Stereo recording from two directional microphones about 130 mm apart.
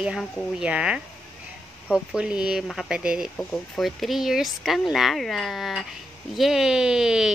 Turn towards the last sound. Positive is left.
turn(degrees=-5)  # may be behind; listen again after turning